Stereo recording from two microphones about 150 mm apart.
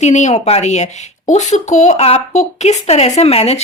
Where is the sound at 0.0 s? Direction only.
50° left (ahead or behind).